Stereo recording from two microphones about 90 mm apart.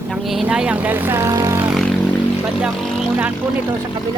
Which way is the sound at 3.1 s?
15° right (ahead or behind).